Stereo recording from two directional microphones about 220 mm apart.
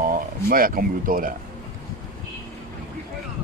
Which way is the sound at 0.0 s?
40° right (ahead or behind).